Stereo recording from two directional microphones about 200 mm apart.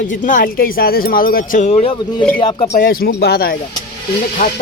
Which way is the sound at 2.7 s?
45° left (ahead or behind).